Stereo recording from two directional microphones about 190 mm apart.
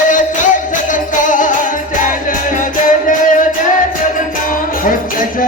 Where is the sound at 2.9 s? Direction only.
45° left (ahead or behind).